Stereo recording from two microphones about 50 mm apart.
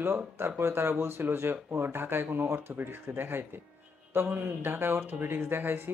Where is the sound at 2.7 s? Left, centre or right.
Right.